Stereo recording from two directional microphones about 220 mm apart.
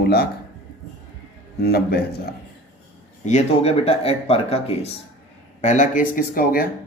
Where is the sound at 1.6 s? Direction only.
45° left (ahead or behind).